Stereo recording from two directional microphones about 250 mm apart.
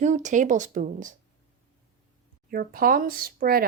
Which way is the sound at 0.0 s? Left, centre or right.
Right.